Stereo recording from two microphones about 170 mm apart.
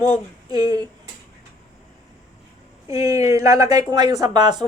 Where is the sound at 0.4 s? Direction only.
25° right (ahead or behind).